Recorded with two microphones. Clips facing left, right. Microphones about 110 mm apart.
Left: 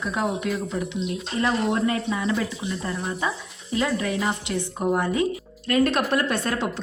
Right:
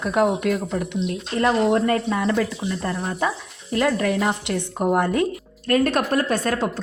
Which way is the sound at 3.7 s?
55° right (ahead or behind).